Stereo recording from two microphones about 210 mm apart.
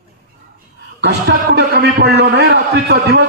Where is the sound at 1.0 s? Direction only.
55° right (ahead or behind).